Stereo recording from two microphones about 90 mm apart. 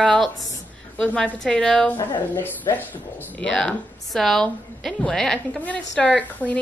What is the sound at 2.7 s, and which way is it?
Speech, 40° left (ahead or behind).